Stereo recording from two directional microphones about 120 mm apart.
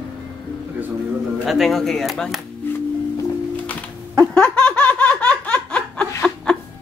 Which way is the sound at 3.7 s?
10° left (ahead or behind).